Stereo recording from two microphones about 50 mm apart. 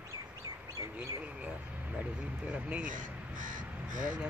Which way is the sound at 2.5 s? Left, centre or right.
Right.